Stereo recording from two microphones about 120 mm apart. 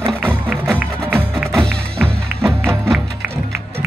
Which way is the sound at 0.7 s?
15° right (ahead or behind).